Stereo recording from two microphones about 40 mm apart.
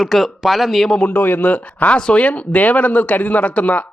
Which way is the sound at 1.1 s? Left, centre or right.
Left.